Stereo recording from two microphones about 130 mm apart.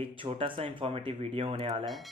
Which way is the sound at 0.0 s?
45° right (ahead or behind).